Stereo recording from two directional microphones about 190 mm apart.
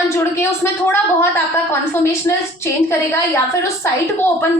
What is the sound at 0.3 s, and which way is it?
Speech, 15° left (ahead or behind).